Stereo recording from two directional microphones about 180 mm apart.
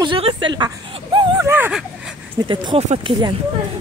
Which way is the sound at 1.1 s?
15° right (ahead or behind).